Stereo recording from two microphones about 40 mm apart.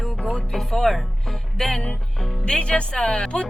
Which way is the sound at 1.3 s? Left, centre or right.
Centre.